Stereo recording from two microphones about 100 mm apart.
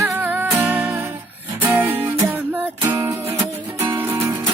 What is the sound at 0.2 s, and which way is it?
Music, 15° right (ahead or behind).